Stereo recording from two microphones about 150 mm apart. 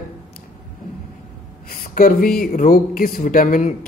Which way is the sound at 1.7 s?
75° left (ahead or behind).